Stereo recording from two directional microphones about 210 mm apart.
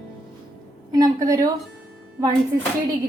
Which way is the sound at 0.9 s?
15° right (ahead or behind).